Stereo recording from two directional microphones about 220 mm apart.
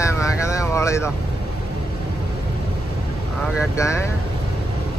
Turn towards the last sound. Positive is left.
turn(degrees=15)  # may be behind; listen again after turning